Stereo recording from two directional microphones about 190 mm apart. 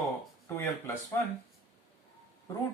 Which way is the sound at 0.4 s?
15° left (ahead or behind).